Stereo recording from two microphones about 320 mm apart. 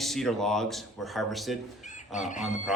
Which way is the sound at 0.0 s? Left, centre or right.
Centre.